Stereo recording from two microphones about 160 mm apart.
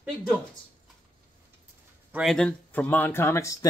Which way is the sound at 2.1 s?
Centre (ahead or behind).